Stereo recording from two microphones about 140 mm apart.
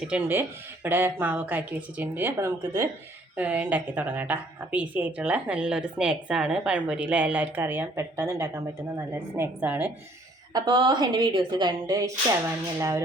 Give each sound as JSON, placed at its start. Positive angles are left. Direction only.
{"t": 0.1, "sound": "a woman's voice", "side_deg": -15}
{"t": 3.3, "sound": "a woman's voice", "side_deg": -10}
{"t": 10.5, "sound": "a woman's voice", "side_deg": -35}